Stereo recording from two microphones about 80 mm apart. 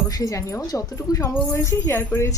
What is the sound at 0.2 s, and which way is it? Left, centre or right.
Speech, left.